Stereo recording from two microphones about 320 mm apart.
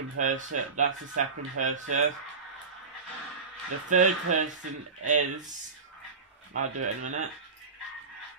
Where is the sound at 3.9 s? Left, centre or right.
Right.